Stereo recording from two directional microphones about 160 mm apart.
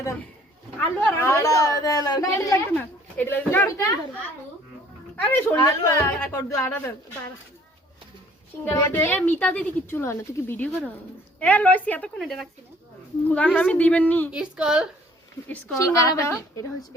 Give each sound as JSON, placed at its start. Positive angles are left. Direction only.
{"t": 0.8, "sound": "a woman's voice", "side_deg": 10}
{"t": 5.1, "sound": "a woman's voice", "side_deg": 10}
{"t": 5.5, "sound": "a woman's voice", "side_deg": 20}
{"t": 8.6, "sound": "a woman's voice", "side_deg": 15}
{"t": 14.3, "sound": "a woman's voice", "side_deg": -5}
{"t": 16.0, "sound": "a woman's voice", "side_deg": 20}